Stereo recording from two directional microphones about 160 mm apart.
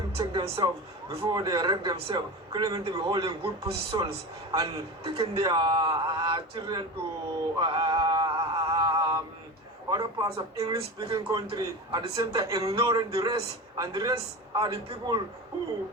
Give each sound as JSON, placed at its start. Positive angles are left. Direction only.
{"t": 0.2, "sound": "music", "side_deg": -30}
{"t": 1.1, "sound": "a man's voice", "side_deg": -30}
{"t": 7.6, "sound": "male singing", "side_deg": -30}
{"t": 9.9, "sound": "a man's voice", "side_deg": -25}